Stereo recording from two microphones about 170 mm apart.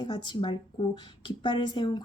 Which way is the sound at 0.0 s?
30° left (ahead or behind).